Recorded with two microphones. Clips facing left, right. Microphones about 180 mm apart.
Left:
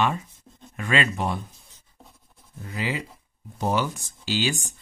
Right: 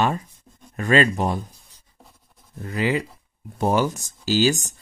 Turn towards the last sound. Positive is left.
turn(degrees=-40)  # may be behind; listen again after turning